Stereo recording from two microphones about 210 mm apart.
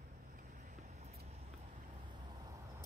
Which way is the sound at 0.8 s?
30° right (ahead or behind).